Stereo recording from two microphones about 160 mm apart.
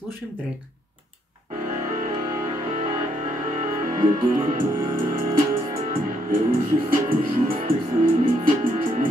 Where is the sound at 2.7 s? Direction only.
55° right (ahead or behind).